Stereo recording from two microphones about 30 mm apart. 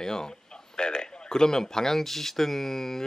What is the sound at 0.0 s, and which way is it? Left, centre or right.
Speech, left.